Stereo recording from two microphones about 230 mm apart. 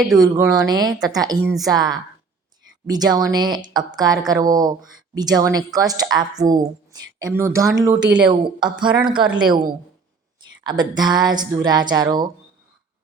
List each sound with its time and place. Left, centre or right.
0.2 s a woman's voice: centre
10.6 s a woman's voice: centre